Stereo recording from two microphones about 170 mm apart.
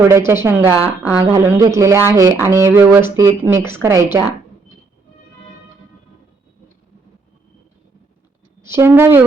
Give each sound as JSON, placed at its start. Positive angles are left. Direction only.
{"t": 0.1, "sound": "speech", "side_deg": -15}
{"t": 8.6, "sound": "speech", "side_deg": -15}